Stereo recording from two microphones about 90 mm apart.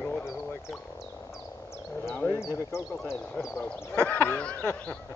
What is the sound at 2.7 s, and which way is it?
Speech, 30° left (ahead or behind).